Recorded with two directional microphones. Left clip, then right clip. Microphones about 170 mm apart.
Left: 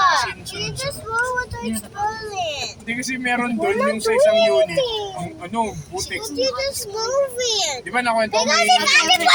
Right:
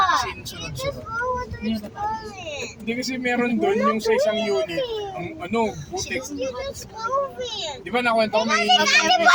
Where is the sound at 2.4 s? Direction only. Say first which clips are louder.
Left 7 dB; 30° left (ahead or behind).